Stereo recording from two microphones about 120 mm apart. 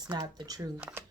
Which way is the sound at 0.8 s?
10° right (ahead or behind).